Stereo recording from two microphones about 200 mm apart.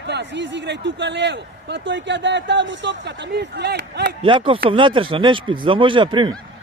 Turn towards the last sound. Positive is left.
turn(degrees=-25)  # may be behind; listen again after turning